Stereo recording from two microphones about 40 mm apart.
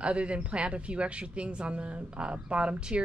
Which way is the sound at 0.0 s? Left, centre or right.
Right.